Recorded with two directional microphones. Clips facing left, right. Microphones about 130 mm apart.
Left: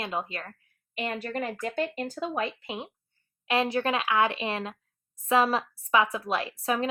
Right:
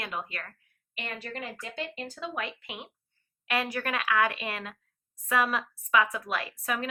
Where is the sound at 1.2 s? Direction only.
50° left (ahead or behind).